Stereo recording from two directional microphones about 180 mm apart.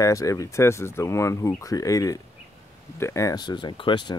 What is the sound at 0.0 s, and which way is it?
Speech, 20° left (ahead or behind).